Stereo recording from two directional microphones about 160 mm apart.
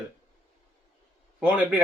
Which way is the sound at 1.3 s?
10° right (ahead or behind).